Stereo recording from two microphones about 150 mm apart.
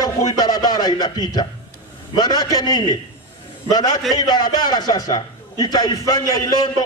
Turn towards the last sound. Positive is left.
turn(degrees=25)  # may be behind; listen again after turning